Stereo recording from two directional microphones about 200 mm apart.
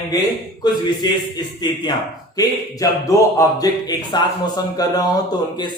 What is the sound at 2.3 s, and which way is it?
A man's voice, 15° left (ahead or behind).